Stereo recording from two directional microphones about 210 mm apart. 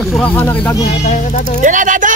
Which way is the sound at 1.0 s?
35° left (ahead or behind).